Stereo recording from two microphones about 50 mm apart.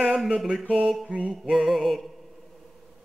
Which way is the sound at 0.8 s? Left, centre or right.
Centre.